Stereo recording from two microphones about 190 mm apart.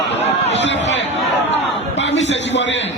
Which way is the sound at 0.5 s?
70° left (ahead or behind).